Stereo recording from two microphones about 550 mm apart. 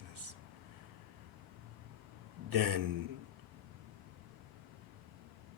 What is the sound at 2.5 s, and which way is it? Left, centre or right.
Speech, right.